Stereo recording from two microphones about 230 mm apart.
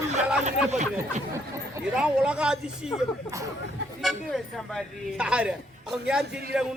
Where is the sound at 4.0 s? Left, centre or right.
Centre.